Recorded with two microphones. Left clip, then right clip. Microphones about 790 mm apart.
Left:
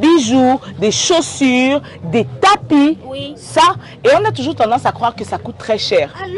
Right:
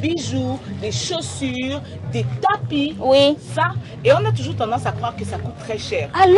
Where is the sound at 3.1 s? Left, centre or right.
Right.